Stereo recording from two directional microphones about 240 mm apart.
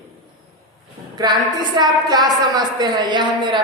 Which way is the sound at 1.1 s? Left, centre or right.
Centre.